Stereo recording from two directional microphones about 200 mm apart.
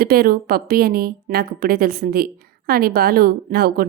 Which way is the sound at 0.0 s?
50° right (ahead or behind).